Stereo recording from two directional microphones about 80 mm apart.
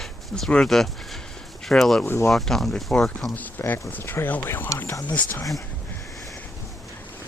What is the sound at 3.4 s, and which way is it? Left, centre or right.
Speech, left.